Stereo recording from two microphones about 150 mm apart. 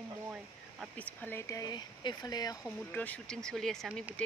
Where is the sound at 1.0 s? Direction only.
10° left (ahead or behind).